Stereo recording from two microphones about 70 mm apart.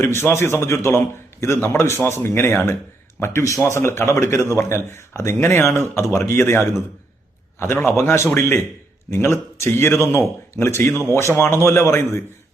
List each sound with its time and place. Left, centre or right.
0.0 s a man's voice: left
7.9 s a man's voice: left